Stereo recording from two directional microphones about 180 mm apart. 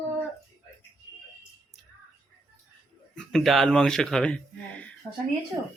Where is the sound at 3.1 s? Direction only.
Centre (ahead or behind).